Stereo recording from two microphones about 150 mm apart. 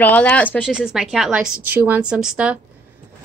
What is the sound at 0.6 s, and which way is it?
A woman's voice, 5° right (ahead or behind).